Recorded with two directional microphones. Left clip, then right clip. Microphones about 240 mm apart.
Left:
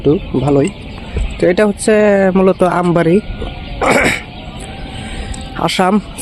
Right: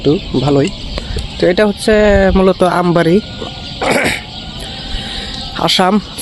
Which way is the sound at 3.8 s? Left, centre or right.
Centre.